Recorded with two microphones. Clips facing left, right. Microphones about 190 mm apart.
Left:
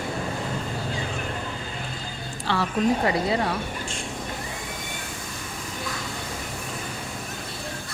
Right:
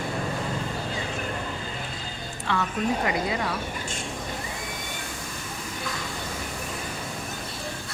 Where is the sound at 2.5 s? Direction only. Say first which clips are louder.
Left 3 dB; 35° left (ahead or behind).